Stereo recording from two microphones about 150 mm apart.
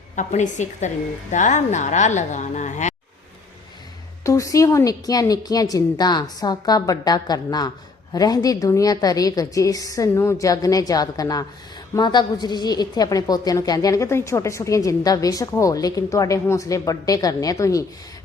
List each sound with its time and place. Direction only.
0.2 s speech: 55° left (ahead or behind)
4.2 s a woman's voice: 20° left (ahead or behind)